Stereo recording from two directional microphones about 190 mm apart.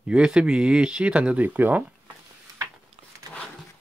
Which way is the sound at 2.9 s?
30° right (ahead or behind).